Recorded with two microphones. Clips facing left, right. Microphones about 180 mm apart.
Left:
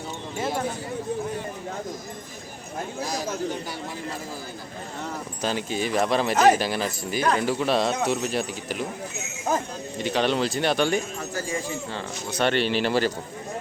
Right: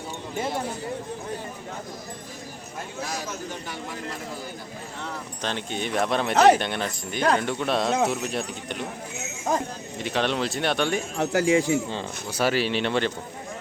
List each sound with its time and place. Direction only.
5.4 s speech: 5° left (ahead or behind)
10.0 s speech: centre (ahead or behind)
11.2 s speech: 75° right (ahead or behind)
11.9 s speech: 15° right (ahead or behind)
12.4 s speech: 5° right (ahead or behind)